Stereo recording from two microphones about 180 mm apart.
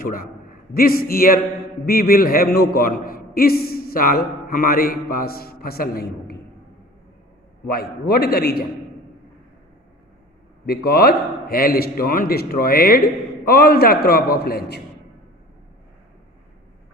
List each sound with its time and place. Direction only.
0.0 s a man's voice: 50° left (ahead or behind)
7.7 s a man's voice: 60° left (ahead or behind)
10.7 s a man's voice: 60° left (ahead or behind)